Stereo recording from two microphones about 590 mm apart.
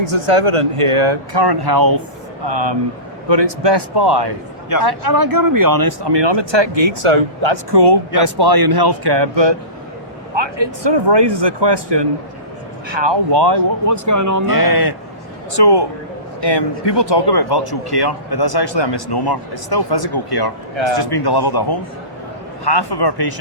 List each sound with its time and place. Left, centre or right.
0.0 s speech: right
2.5 s speech: right
14.5 s speech: left